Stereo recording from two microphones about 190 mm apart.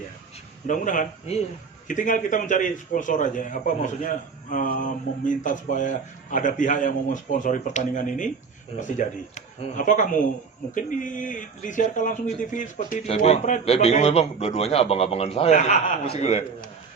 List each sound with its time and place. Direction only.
0.7 s a man's voice: 45° left (ahead or behind)